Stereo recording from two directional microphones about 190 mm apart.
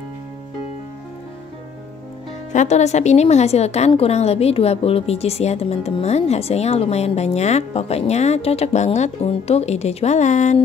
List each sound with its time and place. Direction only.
2.5 s a woman's voice: 40° left (ahead or behind)